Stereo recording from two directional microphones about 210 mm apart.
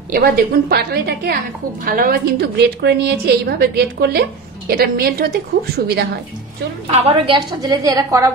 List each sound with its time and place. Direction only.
0.1 s a woman's voice: 45° right (ahead or behind)
6.9 s a woman's voice: 30° right (ahead or behind)
7.6 s a woman's voice: 15° right (ahead or behind)